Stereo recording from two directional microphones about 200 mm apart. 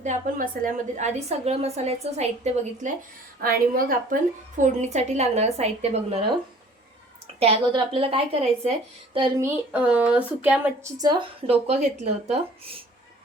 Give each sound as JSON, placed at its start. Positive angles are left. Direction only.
{"t": 0.0, "sound": "a woman's voice", "side_deg": -40}
{"t": 3.4, "sound": "a woman's voice", "side_deg": -45}
{"t": 7.3, "sound": "a woman's voice", "side_deg": -30}
{"t": 9.4, "sound": "speech", "side_deg": -5}
{"t": 11.4, "sound": "a woman's voice", "side_deg": -30}